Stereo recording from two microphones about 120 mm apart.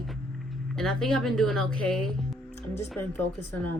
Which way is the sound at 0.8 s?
5° left (ahead or behind).